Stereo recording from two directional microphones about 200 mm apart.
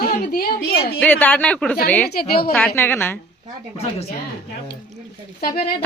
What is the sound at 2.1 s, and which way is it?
Speech, 50° left (ahead or behind).